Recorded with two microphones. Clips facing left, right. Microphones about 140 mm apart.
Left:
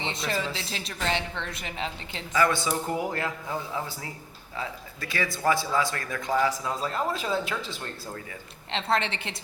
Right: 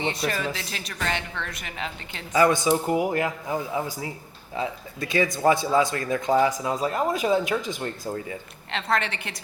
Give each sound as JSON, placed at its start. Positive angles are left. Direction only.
{"t": 0.0, "sound": "a woman's voice", "side_deg": 25}
{"t": 2.3, "sound": "a man's voice", "side_deg": -20}
{"t": 8.7, "sound": "a woman's voice", "side_deg": 25}